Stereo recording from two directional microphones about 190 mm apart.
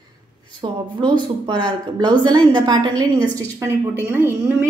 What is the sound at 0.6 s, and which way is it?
A woman's voice, 25° right (ahead or behind).